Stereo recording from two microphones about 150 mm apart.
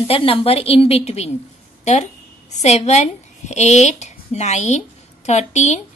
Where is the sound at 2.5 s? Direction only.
45° left (ahead or behind).